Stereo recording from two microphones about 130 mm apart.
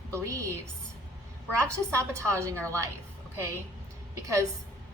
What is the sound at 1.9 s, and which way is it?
Speech, 20° right (ahead or behind).